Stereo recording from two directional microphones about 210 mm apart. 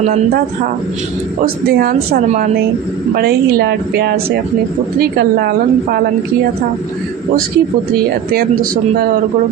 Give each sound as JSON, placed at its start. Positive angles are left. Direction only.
{"t": 1.7, "sound": "speech", "side_deg": -45}